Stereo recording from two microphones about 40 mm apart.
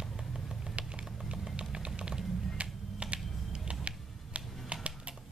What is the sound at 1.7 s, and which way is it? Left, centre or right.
Typing, right.